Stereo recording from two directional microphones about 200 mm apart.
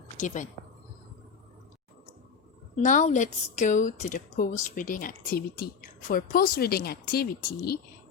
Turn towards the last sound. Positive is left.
turn(degrees=50)  # may be behind; listen again after turning